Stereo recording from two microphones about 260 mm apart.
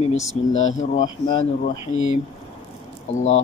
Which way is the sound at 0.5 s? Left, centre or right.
Left.